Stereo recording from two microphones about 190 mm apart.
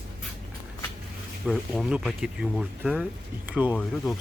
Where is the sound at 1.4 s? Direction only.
5° right (ahead or behind).